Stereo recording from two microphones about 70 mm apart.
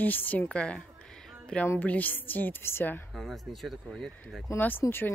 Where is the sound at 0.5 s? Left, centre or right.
Centre; by 3.0 s left.